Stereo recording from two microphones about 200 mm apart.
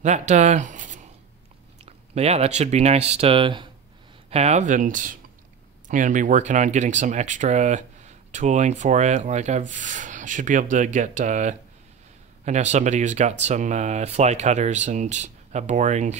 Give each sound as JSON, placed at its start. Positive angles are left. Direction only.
{"t": 0.0, "sound": "speech", "side_deg": -35}